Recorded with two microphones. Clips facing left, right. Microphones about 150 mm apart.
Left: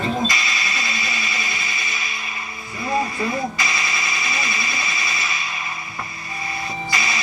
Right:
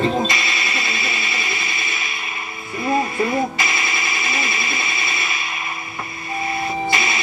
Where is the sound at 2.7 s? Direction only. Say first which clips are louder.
Right 3 dB; 25° right (ahead or behind).